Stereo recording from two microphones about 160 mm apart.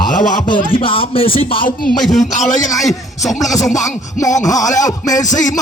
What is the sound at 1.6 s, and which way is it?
Speech, 60° left (ahead or behind).